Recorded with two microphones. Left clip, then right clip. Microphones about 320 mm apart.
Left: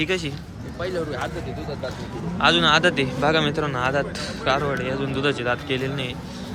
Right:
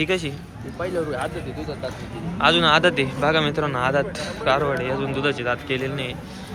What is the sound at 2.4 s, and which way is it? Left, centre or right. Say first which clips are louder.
Speech: right 1 dB; centre.